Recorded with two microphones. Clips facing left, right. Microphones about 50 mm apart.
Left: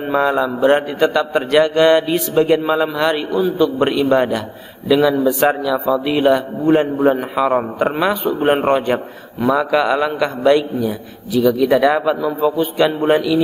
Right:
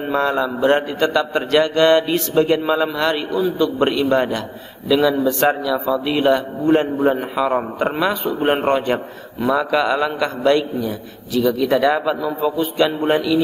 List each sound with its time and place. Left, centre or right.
0.1 s a man's voice: centre